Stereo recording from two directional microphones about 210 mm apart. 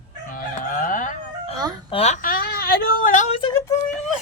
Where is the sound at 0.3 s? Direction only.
40° left (ahead or behind).